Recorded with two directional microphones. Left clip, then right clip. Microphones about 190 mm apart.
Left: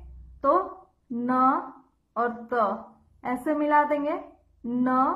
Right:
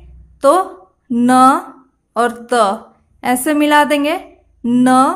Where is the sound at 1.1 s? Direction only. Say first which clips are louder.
Right 13 dB; 50° right (ahead or behind).